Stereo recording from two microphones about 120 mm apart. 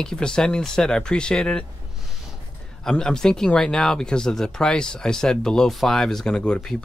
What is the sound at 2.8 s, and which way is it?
Speech, 5° left (ahead or behind).